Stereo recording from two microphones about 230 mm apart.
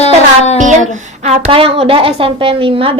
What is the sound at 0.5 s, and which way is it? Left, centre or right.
A woman's voice, right.